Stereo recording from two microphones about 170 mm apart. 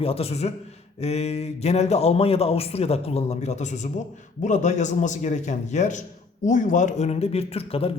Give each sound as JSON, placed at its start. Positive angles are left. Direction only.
{"t": 0.0, "sound": "a man's voice", "side_deg": 35}